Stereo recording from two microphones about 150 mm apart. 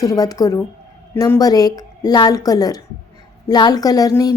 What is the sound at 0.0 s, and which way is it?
A woman's voice, 25° left (ahead or behind).